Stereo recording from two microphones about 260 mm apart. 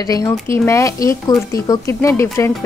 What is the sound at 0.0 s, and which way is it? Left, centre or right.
Speech, centre.